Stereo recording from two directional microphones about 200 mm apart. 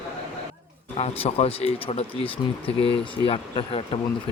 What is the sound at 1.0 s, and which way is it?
Speech, 30° left (ahead or behind).